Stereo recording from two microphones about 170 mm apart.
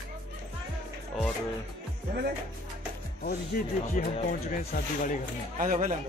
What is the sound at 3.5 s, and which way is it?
Speech, 55° left (ahead or behind).